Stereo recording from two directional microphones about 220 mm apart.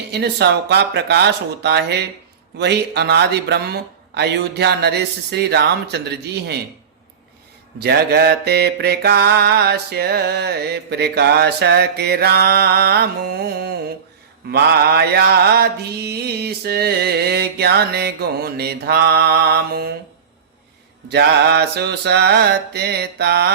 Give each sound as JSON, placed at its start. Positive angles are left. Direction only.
{"t": 0.1, "sound": "mantra", "side_deg": -50}
{"t": 7.8, "sound": "mantra", "side_deg": -45}
{"t": 14.5, "sound": "mantra", "side_deg": -45}
{"t": 21.1, "sound": "mantra", "side_deg": -50}